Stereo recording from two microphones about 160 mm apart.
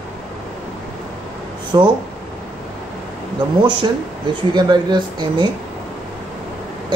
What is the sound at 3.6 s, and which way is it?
Speech, 30° right (ahead or behind).